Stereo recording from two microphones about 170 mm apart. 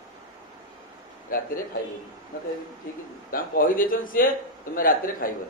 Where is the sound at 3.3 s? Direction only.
55° left (ahead or behind).